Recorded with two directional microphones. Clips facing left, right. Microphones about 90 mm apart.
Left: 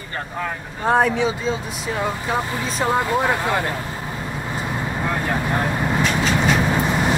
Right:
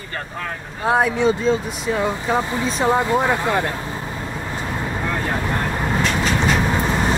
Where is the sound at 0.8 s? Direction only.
5° right (ahead or behind).